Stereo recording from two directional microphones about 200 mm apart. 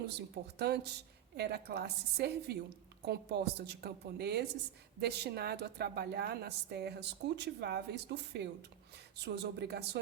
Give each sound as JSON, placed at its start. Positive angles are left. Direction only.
{"t": 0.6, "sound": "a woman's voice", "side_deg": -55}